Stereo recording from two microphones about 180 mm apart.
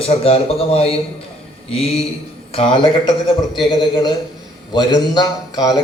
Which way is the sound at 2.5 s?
30° left (ahead or behind).